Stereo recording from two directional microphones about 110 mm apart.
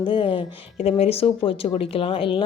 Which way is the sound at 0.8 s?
65° left (ahead or behind).